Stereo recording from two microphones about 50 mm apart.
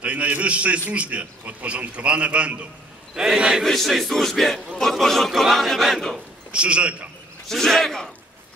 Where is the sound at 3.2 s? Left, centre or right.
Centre.